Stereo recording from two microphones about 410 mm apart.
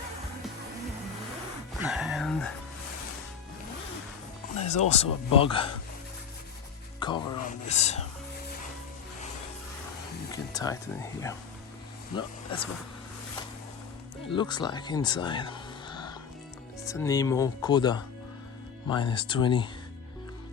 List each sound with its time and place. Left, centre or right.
1.8 s music: centre
4.6 s speech: centre
7.0 s speech: centre
10.5 s speech: centre
14.3 s speech: centre